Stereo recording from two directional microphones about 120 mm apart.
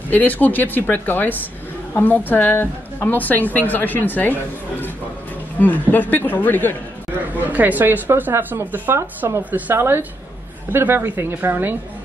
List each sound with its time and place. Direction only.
0.1 s a woman's voice: 15° left (ahead or behind)
7.3 s speech: 15° right (ahead or behind)